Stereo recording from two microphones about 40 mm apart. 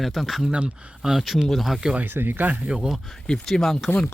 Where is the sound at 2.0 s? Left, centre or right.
Right.